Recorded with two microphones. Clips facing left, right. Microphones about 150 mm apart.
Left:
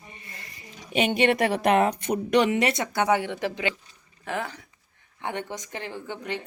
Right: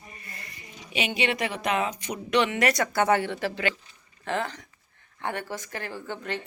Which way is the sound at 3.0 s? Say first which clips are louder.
Left 1 dB; 15° left (ahead or behind).